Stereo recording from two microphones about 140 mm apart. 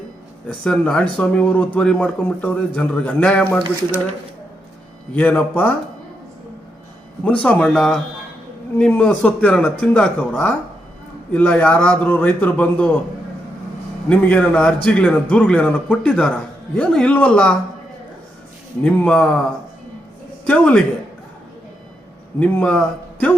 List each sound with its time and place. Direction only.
0.4 s a man's voice: 5° left (ahead or behind)
5.1 s a man's voice: 10° left (ahead or behind)
7.3 s a man's voice: 10° left (ahead or behind)
14.1 s a man's voice: 10° left (ahead or behind)
18.8 s a man's voice: 10° left (ahead or behind)
20.5 s a man's voice: 10° left (ahead or behind)
22.4 s a man's voice: 5° left (ahead or behind)